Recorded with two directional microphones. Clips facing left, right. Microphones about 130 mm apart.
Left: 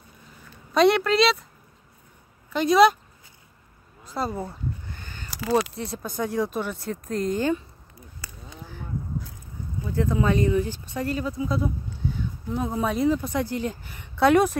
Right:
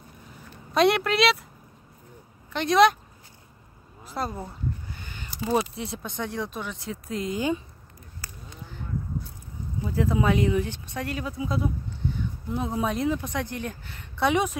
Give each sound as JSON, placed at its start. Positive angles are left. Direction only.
{"t": 0.7, "sound": "speech", "side_deg": 0}
{"t": 2.5, "sound": "speech", "side_deg": 5}
{"t": 4.0, "sound": "speech", "side_deg": 0}
{"t": 4.9, "sound": "a sound", "side_deg": -15}
{"t": 5.9, "sound": "speech", "side_deg": 5}
{"t": 9.8, "sound": "speech", "side_deg": -5}